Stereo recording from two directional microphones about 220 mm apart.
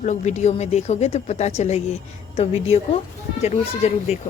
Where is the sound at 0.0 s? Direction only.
30° left (ahead or behind).